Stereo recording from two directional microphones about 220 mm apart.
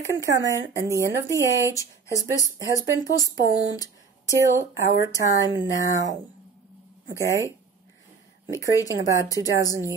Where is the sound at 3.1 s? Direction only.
15° left (ahead or behind).